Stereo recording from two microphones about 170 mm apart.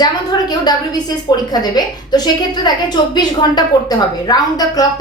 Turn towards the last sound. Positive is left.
turn(degrees=20)  # may be behind; listen again after turning